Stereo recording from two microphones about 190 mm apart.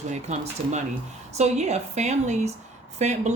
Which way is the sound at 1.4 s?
35° right (ahead or behind).